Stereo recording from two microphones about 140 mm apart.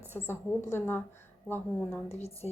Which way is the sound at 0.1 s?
15° left (ahead or behind).